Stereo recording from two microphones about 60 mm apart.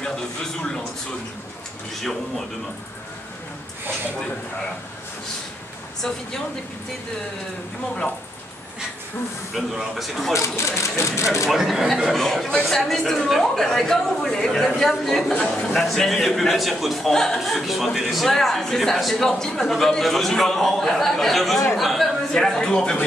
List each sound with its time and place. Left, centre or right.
0.0 s speech: centre
6.0 s speech: centre
9.5 s a man's voice: centre
10.3 s speech: left
11.4 s a man's voice: centre